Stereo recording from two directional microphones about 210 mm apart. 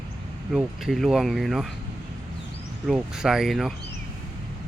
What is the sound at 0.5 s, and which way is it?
Speech, centre (ahead or behind).